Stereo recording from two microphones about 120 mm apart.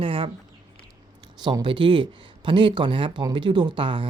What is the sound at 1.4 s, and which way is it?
Speech, 40° right (ahead or behind).